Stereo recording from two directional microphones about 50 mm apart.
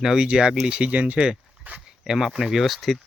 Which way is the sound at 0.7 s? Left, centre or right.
Right.